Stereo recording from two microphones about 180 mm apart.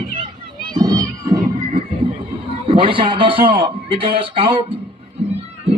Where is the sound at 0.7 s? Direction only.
20° right (ahead or behind).